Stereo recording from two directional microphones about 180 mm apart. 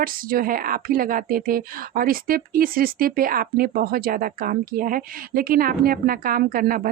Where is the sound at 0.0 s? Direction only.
50° right (ahead or behind).